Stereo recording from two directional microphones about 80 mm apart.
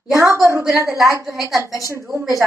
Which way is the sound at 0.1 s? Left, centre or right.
Right.